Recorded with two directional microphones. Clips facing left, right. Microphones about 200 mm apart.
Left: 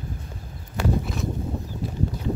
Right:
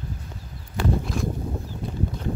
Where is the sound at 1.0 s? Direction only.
Centre (ahead or behind).